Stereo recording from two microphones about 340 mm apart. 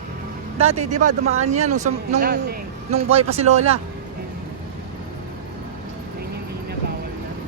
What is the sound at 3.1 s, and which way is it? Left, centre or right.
Speech, centre.